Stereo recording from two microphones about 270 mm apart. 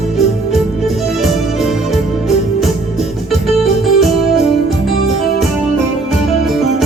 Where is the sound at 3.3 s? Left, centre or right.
Centre.